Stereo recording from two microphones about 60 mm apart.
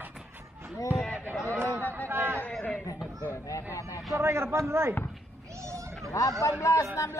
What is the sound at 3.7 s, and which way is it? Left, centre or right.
Vehicle, left.